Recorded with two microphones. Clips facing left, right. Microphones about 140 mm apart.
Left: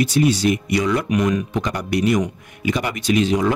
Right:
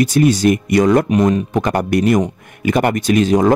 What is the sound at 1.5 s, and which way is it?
A man's voice, 55° right (ahead or behind).